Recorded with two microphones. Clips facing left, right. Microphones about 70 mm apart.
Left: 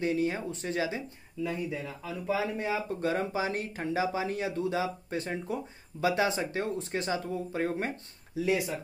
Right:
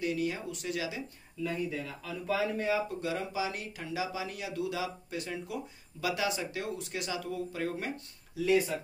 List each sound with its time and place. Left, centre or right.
0.0 s speech: left
1.4 s speech: centre
2.9 s speech: left
8.4 s speech: centre